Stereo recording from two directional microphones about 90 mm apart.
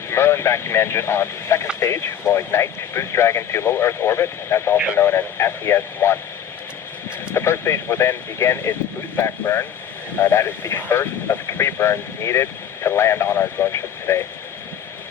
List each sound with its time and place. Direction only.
0.1 s speech: 30° left (ahead or behind)
7.3 s speech: 30° left (ahead or behind)